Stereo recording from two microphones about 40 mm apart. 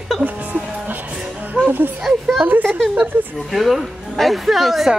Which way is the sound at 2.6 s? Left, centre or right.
Centre.